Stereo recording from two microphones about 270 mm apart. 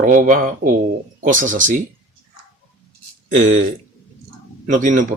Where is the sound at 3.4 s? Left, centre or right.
Right.